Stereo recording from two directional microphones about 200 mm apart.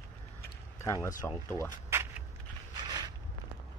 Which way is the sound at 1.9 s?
10° right (ahead or behind).